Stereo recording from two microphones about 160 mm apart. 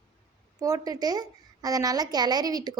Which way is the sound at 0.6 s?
25° right (ahead or behind).